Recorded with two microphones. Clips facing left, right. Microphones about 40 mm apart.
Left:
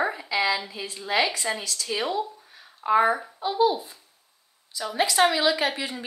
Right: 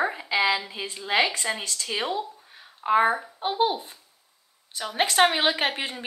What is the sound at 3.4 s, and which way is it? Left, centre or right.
Speech, right.